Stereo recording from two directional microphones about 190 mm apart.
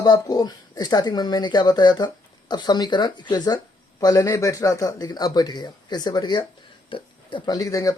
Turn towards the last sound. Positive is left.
turn(degrees=15)  # may be behind; listen again after turning